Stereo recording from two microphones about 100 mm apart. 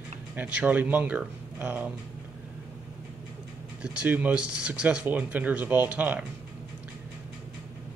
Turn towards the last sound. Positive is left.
turn(degrees=-15)  # may be behind; listen again after turning